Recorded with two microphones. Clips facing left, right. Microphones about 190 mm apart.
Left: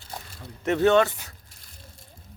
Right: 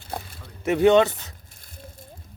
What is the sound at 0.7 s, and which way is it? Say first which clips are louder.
Speech: right 3 dB; 15° right (ahead or behind).